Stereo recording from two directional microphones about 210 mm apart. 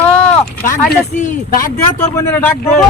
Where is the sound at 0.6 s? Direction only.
35° left (ahead or behind).